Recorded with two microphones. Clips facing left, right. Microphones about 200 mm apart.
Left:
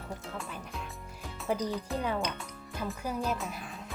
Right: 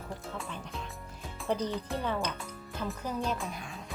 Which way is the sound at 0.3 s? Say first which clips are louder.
Even; centre (ahead or behind).